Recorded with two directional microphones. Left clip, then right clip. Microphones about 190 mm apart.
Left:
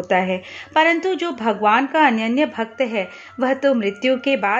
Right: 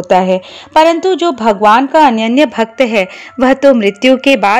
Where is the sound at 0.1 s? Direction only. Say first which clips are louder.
Right 10 dB; 35° right (ahead or behind).